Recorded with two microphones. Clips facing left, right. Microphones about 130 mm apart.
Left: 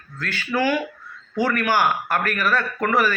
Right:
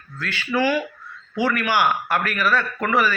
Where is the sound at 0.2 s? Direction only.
45° left (ahead or behind).